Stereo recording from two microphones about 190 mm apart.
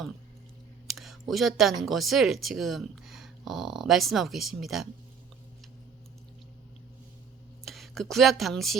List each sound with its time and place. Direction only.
0.9 s a sound: centre (ahead or behind)
1.3 s speech: centre (ahead or behind)
7.6 s speech: centre (ahead or behind)